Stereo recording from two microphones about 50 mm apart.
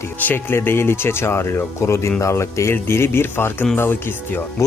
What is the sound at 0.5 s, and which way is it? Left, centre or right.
Speech, left.